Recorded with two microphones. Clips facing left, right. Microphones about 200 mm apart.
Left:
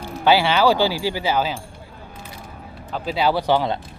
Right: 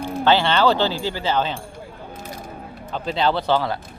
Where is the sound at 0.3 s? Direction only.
10° left (ahead or behind).